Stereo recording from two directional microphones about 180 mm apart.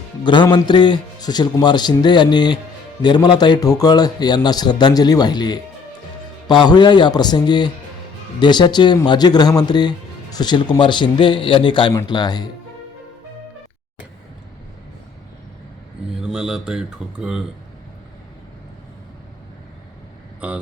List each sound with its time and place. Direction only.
0.4 s a man's voice: 25° left (ahead or behind)
16.2 s speech: 5° right (ahead or behind)